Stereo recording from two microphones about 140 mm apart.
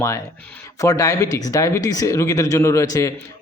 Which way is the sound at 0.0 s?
20° left (ahead or behind).